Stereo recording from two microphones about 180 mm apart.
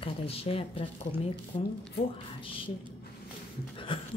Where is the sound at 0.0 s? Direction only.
30° left (ahead or behind).